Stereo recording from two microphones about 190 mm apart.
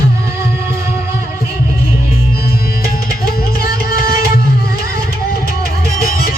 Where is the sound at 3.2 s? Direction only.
50° left (ahead or behind).